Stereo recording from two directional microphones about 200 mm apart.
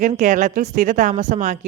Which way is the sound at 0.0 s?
35° right (ahead or behind).